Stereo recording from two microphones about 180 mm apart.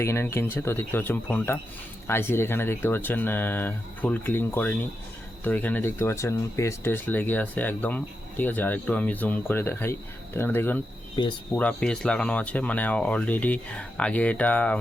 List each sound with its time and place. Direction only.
0.0 s speech: 15° left (ahead or behind)
11.1 s speech: 25° left (ahead or behind)
11.5 s speech: 5° left (ahead or behind)